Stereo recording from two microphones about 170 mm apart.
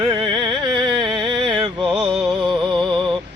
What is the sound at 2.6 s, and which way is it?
Music, 30° right (ahead or behind).